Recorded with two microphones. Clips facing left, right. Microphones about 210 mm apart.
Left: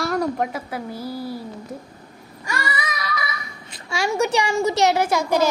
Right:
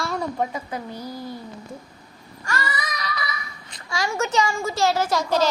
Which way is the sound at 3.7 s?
25° left (ahead or behind).